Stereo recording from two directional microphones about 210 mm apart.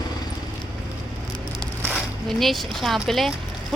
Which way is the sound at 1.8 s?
Centre (ahead or behind).